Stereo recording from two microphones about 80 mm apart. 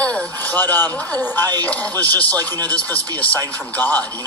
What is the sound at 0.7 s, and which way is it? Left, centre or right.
Speech, left.